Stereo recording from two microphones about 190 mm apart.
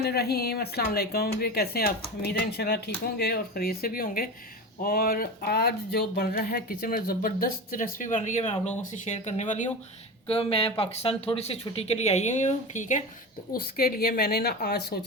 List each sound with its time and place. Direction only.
0.0 s speech: 55° left (ahead or behind); by 13.0 s 40° left (ahead or behind)
13.5 s speech: 50° left (ahead or behind)